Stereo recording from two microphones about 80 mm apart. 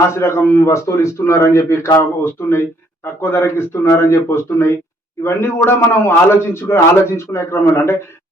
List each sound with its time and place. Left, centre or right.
0.1 s a man's voice: left